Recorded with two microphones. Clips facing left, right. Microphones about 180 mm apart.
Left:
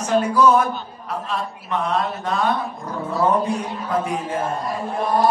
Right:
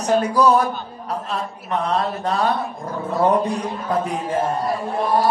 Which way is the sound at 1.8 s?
35° right (ahead or behind).